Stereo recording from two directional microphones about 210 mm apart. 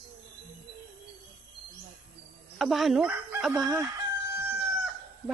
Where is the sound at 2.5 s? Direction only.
Centre (ahead or behind).